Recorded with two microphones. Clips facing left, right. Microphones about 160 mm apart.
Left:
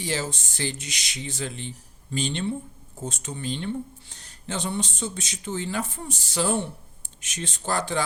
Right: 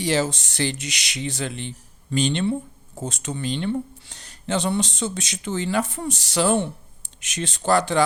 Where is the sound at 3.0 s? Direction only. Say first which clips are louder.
Right 4 dB; 90° right; by 8.0 s 75° right (ahead or behind).